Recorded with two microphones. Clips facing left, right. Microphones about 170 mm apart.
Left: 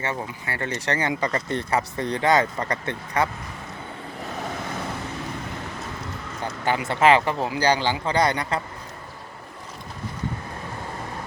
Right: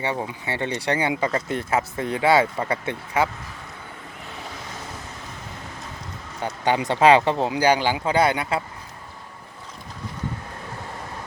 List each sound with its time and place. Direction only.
0.0 s speech: 15° right (ahead or behind)
6.4 s speech: 20° right (ahead or behind)